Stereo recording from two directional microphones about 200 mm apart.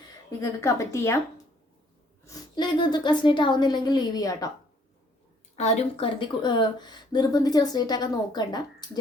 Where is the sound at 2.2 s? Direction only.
20° left (ahead or behind).